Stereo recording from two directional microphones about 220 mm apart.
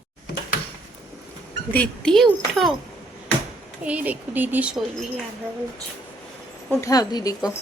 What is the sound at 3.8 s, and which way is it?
Speech, 5° right (ahead or behind).